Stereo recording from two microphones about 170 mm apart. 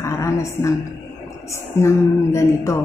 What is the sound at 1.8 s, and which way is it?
Speech, 15° left (ahead or behind).